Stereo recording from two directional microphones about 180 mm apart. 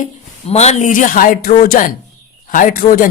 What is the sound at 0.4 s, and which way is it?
Speech, 35° left (ahead or behind).